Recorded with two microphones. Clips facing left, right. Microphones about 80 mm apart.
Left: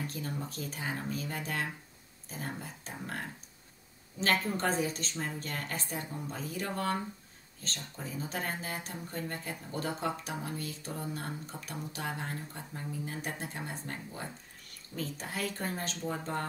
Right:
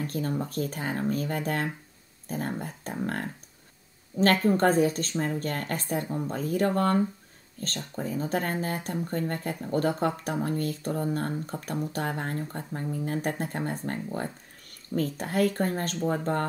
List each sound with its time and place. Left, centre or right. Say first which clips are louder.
0.0 s speech: right 8 dB; right